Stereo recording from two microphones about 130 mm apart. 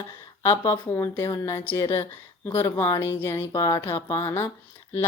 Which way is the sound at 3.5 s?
30° left (ahead or behind).